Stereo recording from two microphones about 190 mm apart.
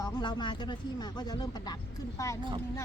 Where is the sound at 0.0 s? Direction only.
25° left (ahead or behind).